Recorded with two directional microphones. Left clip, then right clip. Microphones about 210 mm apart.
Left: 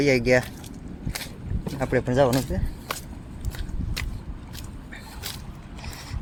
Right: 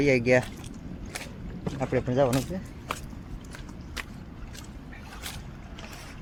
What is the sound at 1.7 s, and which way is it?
Speech, 20° left (ahead or behind).